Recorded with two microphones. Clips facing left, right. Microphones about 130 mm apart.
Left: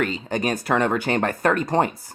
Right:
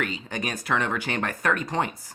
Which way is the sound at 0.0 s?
40° left (ahead or behind).